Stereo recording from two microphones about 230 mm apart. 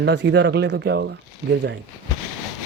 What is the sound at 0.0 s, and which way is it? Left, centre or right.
Speech, right.